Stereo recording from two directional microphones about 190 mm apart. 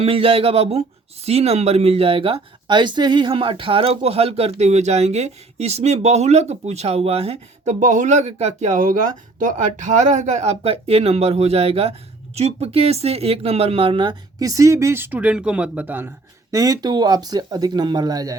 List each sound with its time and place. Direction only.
0.0 s speech: 30° right (ahead or behind)